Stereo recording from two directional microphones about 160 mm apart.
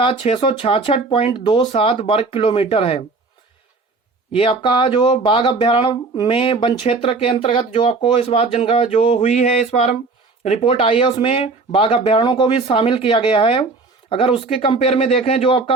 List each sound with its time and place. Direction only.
0.0 s speech: 35° left (ahead or behind)
4.3 s speech: 35° left (ahead or behind)